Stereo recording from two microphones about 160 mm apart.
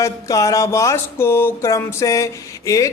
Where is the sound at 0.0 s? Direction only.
20° left (ahead or behind).